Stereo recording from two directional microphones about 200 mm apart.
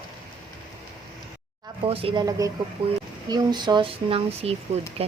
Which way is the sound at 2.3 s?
15° right (ahead or behind).